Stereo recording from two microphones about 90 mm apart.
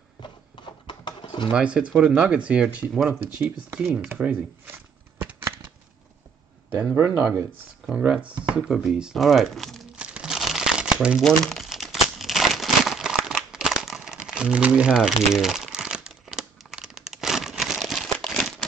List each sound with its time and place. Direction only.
0.8 s a sound: 60° left (ahead or behind)
1.5 s speech: 15° right (ahead or behind)
7.0 s speech: 30° right (ahead or behind)
7.8 s speech: 10° right (ahead or behind)
9.9 s crumpling: 10° right (ahead or behind)
11.2 s crumpling: 5° left (ahead or behind)